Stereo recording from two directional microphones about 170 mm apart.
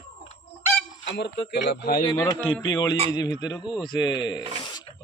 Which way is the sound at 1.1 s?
90° left.